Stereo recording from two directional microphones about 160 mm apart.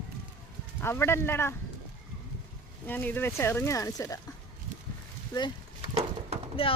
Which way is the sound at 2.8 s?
10° left (ahead or behind).